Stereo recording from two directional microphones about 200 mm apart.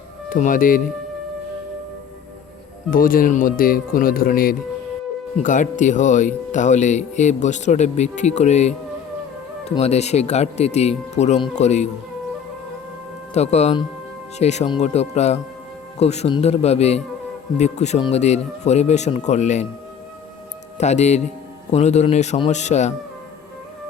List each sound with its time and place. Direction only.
0.3 s speech: 40° left (ahead or behind)
2.9 s speech: 45° left (ahead or behind)
13.3 s speech: 35° left (ahead or behind)
20.7 s speech: 35° left (ahead or behind)